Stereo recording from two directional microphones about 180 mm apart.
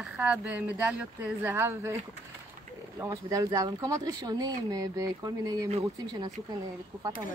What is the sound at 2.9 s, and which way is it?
Speech, 20° right (ahead or behind).